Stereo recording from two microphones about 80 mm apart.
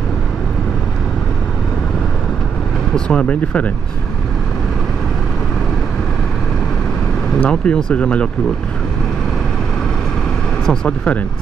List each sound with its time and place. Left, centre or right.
2.9 s speech: centre
7.4 s speech: centre
10.7 s speech: centre